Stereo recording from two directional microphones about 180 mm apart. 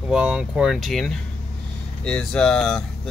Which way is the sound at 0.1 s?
5° right (ahead or behind).